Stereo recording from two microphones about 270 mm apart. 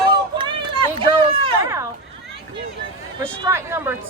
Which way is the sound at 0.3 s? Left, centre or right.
Centre.